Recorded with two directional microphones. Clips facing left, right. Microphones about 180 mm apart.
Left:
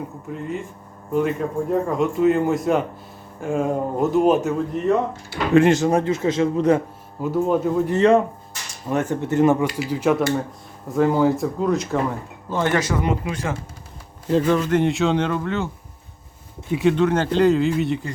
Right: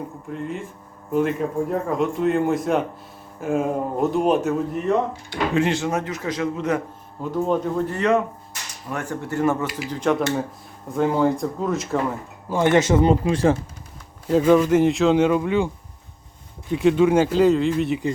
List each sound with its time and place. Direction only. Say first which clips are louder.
0.3 s speech: left 1 dB; centre (ahead or behind)
5.5 s a man's voice: left 8 dB; 45° left (ahead or behind); by 6.8 s 30° left (ahead or behind)
7.2 s speech: left 2 dB; 5° left (ahead or behind)
7.9 s speech: left 6 dB; 30° left (ahead or behind)
9.7 s speech: left 2 dB; 10° left (ahead or behind)
12.5 s speech: right 4 dB; 20° right (ahead or behind)
14.3 s a man's voice: right 3 dB; 5° right (ahead or behind)
16.7 s speech: right 2 dB; 5° right (ahead or behind)